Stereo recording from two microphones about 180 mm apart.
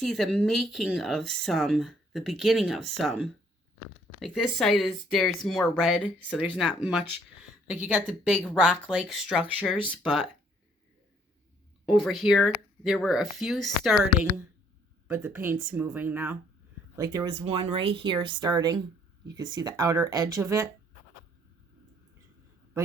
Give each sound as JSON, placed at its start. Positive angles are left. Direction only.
{"t": 0.0, "sound": "speech", "side_deg": 0}
{"t": 10.0, "sound": "speech", "side_deg": 5}
{"t": 11.9, "sound": "speech", "side_deg": 0}
{"t": 15.0, "sound": "speech", "side_deg": -10}
{"t": 17.2, "sound": "speech", "side_deg": -30}